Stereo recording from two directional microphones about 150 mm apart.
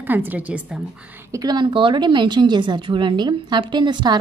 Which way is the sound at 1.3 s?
25° right (ahead or behind).